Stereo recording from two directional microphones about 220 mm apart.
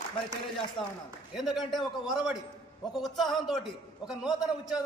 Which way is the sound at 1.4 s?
Centre (ahead or behind).